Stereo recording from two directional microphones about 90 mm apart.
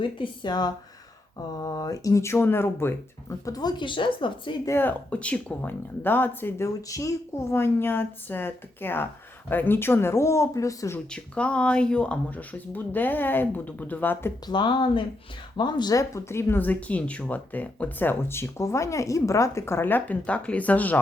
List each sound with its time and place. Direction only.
0.0 s speech: 60° left (ahead or behind)
1.6 s speech: 40° left (ahead or behind); by 4.5 s 65° left (ahead or behind)
4.8 s speech: 20° left (ahead or behind)
6.8 s speech: 40° left (ahead or behind)
7.5 s speech: 25° left (ahead or behind)
11.1 s speech: 10° left (ahead or behind)
14.4 s speech: 60° left (ahead or behind)
15.5 s speech: 55° left (ahead or behind); by 21.0 s 15° left (ahead or behind)